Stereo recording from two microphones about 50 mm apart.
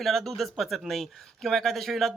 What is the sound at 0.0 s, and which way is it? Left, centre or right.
Speech, centre.